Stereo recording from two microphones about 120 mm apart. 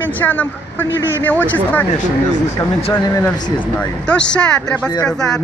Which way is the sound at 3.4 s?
35° left (ahead or behind).